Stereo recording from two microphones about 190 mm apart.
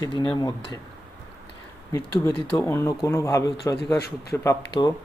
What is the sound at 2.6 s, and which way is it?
Speech, 10° left (ahead or behind).